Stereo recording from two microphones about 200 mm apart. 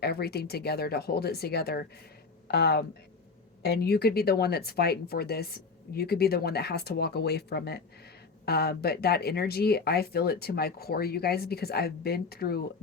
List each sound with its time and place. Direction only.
0.0 s speech: 50° left (ahead or behind)